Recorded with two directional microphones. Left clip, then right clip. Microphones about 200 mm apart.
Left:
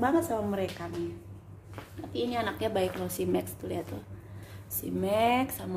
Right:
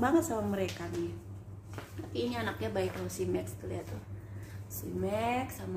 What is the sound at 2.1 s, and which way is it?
A woman's voice, 25° left (ahead or behind).